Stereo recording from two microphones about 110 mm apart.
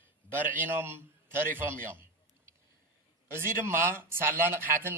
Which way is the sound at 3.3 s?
20° right (ahead or behind).